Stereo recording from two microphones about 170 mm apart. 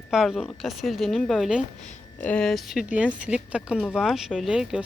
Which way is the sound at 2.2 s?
10° left (ahead or behind).